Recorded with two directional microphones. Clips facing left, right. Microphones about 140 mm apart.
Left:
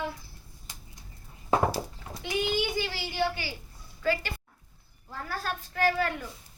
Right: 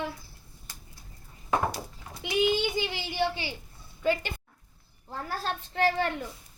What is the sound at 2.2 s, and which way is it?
A child's voice, 20° right (ahead or behind).